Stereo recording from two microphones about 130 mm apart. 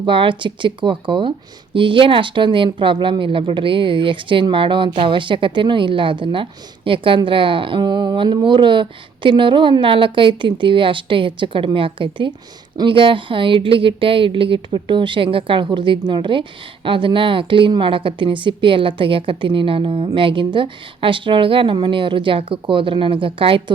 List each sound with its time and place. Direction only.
0.0 s speech: 40° right (ahead or behind)